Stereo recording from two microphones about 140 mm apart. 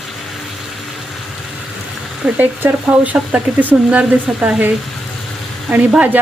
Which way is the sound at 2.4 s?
15° right (ahead or behind).